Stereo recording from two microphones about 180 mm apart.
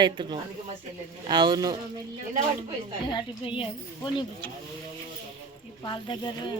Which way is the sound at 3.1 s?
25° left (ahead or behind).